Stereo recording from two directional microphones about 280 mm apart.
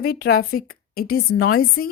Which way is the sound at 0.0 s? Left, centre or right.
Left.